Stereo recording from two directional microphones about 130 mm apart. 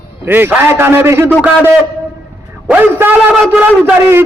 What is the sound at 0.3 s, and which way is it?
A man's voice, 15° right (ahead or behind).